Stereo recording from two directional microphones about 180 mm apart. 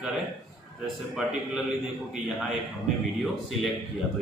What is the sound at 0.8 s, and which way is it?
Speech, 5° right (ahead or behind).